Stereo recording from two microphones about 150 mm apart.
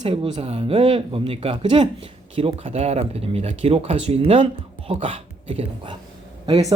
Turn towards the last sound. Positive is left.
turn(degrees=-25)  # may be behind; listen again after turning